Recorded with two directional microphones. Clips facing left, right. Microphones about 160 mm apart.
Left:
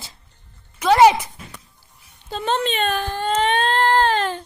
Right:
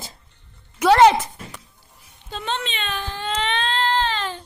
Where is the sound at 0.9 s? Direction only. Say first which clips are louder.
Left 1 dB; 10° left (ahead or behind).